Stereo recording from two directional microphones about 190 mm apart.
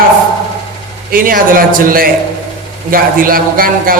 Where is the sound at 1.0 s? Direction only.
50° right (ahead or behind).